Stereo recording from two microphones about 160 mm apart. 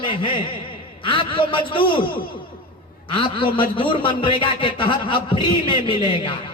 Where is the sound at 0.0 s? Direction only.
30° left (ahead or behind).